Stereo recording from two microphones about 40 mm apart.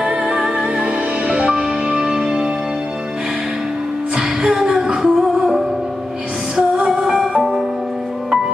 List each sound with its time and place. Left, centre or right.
0.0 s music: right
1.5 s music: centre
4.1 s music: centre
4.7 s singing: centre
6.8 s music: right
7.3 s music: centre